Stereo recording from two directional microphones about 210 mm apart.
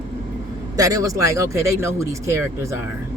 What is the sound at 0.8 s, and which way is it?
Speech, 15° right (ahead or behind).